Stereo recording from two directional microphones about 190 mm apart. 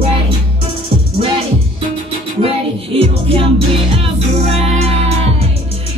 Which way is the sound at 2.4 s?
30° right (ahead or behind).